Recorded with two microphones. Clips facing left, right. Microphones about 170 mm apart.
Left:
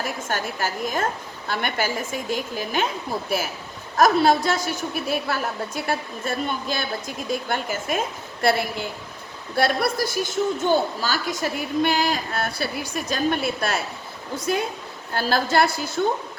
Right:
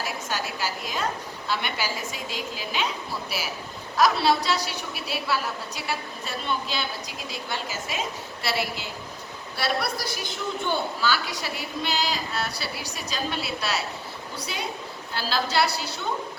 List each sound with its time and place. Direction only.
0.0 s a woman's voice: 50° left (ahead or behind)